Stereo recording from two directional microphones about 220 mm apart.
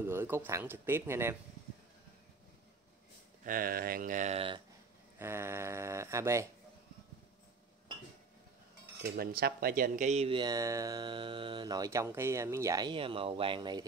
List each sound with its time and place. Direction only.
0.0 s speech: 10° right (ahead or behind)
3.4 s speech: 40° right (ahead or behind); by 4.6 s 25° right (ahead or behind)
5.2 s speech: 10° right (ahead or behind)
9.1 s speech: 40° right (ahead or behind); by 13.8 s 20° right (ahead or behind)